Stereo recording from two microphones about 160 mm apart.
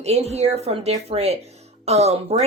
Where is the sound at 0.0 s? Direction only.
40° right (ahead or behind).